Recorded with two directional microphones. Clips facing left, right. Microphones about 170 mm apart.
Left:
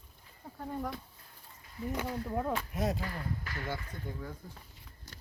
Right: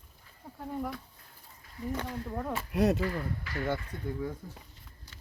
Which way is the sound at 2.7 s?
75° right (ahead or behind).